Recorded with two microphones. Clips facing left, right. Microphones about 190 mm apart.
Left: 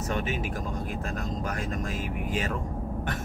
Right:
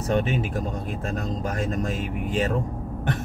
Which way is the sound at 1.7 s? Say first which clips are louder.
Right 5 dB; 30° right (ahead or behind).